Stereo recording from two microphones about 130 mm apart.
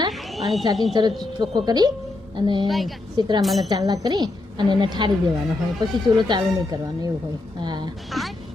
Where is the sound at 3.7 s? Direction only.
30° right (ahead or behind).